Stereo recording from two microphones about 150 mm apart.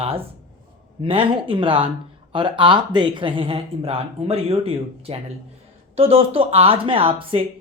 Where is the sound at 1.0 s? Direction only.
35° right (ahead or behind).